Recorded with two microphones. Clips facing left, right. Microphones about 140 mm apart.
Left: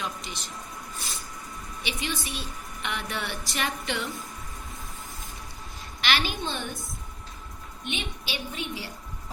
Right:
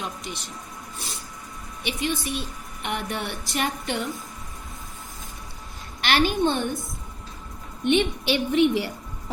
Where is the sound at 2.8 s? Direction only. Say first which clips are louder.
Right 4 dB; 50° right (ahead or behind).